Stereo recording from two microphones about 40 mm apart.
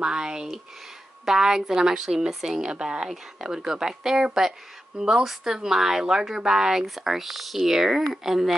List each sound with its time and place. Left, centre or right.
0.0 s a woman's voice: centre
2.7 s a woman's voice: right